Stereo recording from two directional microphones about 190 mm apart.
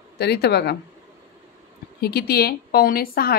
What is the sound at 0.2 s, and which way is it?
Speech, 60° left (ahead or behind).